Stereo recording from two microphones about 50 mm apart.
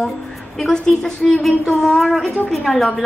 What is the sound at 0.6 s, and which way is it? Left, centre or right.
A woman's voice, centre.